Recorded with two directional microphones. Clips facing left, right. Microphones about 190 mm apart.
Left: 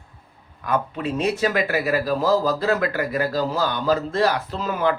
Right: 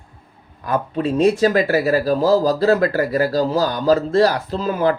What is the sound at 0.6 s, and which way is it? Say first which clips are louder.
Speech: right 4 dB; 35° right (ahead or behind).